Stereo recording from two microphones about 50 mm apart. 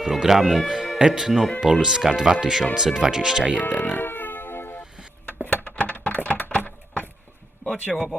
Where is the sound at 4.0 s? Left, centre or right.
Left.